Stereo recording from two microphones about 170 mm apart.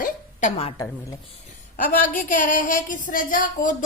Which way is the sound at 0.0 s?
45° left (ahead or behind).